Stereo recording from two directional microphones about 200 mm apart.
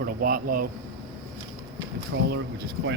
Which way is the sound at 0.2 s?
45° right (ahead or behind).